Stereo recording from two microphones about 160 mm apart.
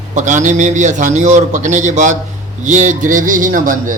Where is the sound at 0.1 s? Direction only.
50° right (ahead or behind).